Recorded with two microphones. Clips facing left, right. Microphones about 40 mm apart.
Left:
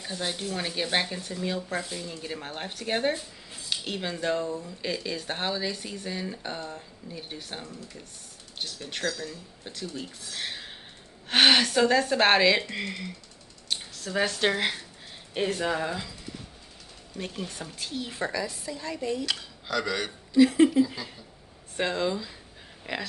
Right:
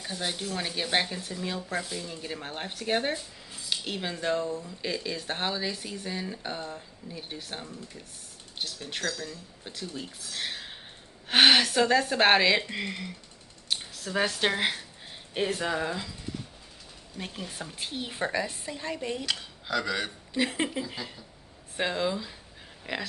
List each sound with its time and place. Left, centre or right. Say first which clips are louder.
0.0 s speech: left 1 dB; centre
17.2 s speech: left 2 dB; centre
17.7 s speech: even; right
19.7 s speech: even; centre
20.3 s speech: left 10 dB; right
21.7 s speech: left 1 dB; centre